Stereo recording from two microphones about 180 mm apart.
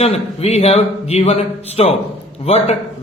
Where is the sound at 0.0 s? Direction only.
35° left (ahead or behind).